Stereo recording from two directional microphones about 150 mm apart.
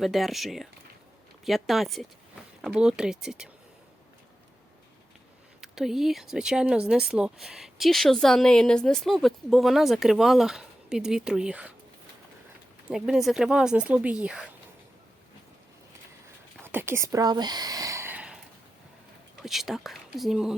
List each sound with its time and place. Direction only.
0.0 s speech: centre (ahead or behind)
5.5 s speech: 5° right (ahead or behind)
12.9 s speech: centre (ahead or behind)
16.6 s speech: 15° right (ahead or behind)
19.4 s speech: centre (ahead or behind)